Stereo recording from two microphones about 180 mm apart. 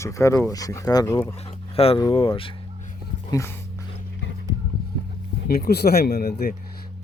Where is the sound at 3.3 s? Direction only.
15° left (ahead or behind).